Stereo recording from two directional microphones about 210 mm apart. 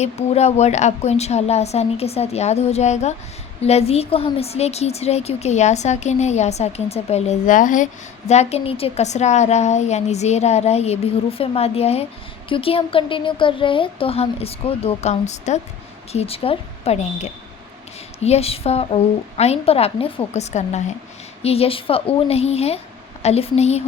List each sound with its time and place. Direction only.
0.0 s a woman's voice: 30° left (ahead or behind)